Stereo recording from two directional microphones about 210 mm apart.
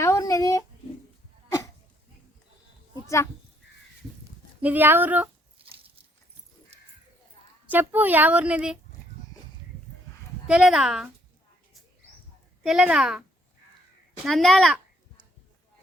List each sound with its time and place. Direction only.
0.0 s a sound: 15° left (ahead or behind)
4.6 s a woman's voice: 10° right (ahead or behind)
5.5 s a sound: 25° right (ahead or behind)
7.7 s a woman's voice: 10° right (ahead or behind)
10.4 s speech: 5° right (ahead or behind)
12.6 s speech: 5° right (ahead or behind)
14.3 s speech: centre (ahead or behind)